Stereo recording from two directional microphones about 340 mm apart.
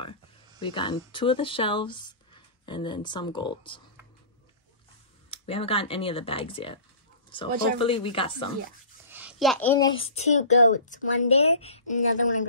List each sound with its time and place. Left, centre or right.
0.6 s a woman's voice: centre
5.3 s a woman's voice: centre
9.1 s a woman's voice: centre; by 12.4 s left